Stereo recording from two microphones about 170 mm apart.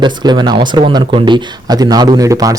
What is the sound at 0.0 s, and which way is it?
Speech, 25° right (ahead or behind).